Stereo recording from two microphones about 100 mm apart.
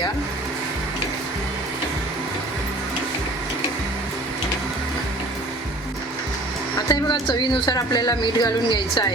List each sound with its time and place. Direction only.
6.8 s speech: 45° left (ahead or behind)